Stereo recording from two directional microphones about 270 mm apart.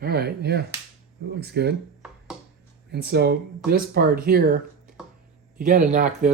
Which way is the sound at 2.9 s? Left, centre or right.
Right.